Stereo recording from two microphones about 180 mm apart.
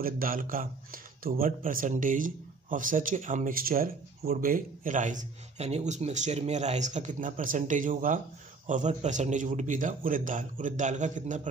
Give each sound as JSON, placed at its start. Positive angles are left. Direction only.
{"t": 0.0, "sound": "speech", "side_deg": -50}